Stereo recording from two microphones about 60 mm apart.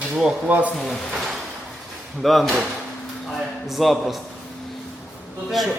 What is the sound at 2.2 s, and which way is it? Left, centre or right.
Speech, centre.